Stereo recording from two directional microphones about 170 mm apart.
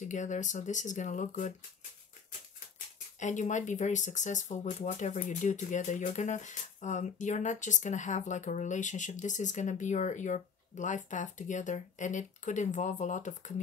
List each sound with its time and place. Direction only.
0.1 s speech: 45° left (ahead or behind)
3.2 s speech: 45° left (ahead or behind)